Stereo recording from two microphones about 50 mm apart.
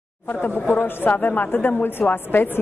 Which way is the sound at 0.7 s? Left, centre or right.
Left.